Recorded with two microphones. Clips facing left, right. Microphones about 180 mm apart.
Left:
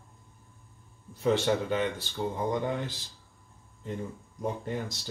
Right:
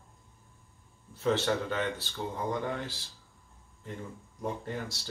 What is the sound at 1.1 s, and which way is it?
Speech, 15° left (ahead or behind).